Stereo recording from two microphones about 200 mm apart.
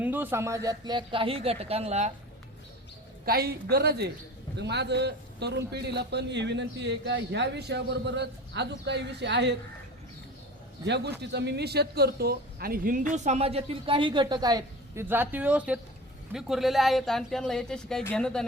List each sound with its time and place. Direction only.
0.0 s speech: 10° right (ahead or behind); by 2.1 s 35° right (ahead or behind)
3.2 s a woman's voice: 50° right (ahead or behind)
10.8 s a man's voice: 55° right (ahead or behind); by 18.4 s 5° left (ahead or behind)